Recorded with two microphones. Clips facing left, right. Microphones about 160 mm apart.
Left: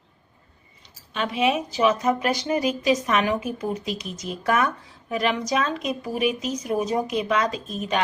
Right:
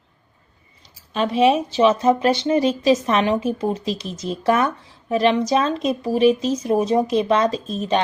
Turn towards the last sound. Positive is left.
turn(degrees=-30)  # may be behind; listen again after turning